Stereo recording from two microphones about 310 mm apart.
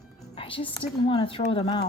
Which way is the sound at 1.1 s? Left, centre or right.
Centre.